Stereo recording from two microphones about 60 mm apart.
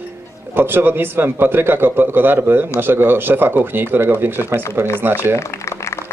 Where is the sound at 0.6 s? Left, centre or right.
Right.